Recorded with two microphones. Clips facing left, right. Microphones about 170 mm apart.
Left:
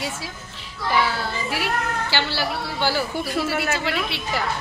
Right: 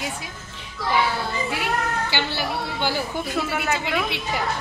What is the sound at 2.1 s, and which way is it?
A woman's voice, 20° right (ahead or behind).